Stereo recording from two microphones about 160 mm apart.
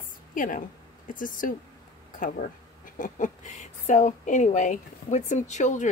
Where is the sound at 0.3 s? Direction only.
55° left (ahead or behind).